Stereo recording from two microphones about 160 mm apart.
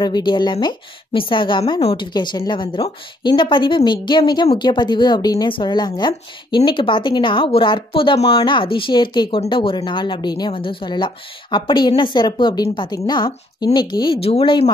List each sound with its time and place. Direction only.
0.0 s speech: 25° left (ahead or behind)